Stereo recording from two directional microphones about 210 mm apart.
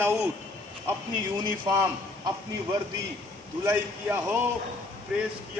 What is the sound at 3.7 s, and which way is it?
A man's voice, 10° right (ahead or behind).